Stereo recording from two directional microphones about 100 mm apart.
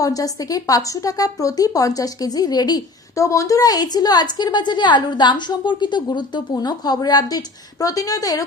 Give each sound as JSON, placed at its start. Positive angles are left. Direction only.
{"t": 0.0, "sound": "a woman's voice", "side_deg": 35}